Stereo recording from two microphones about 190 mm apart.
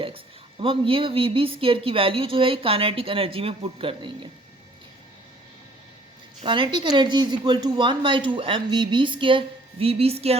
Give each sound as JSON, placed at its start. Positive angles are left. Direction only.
{"t": 0.6, "sound": "a woman's voice", "side_deg": -30}
{"t": 6.4, "sound": "a woman's voice", "side_deg": -25}